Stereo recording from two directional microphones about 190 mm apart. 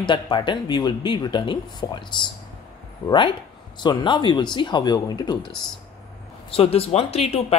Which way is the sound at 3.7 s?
25° left (ahead or behind).